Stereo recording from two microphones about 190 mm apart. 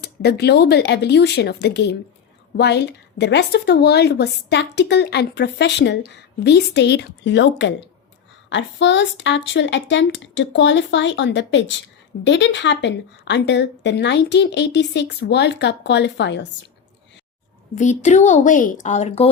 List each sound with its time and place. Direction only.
0.0 s a woman's voice: 60° left (ahead or behind)
17.7 s speech: 40° left (ahead or behind)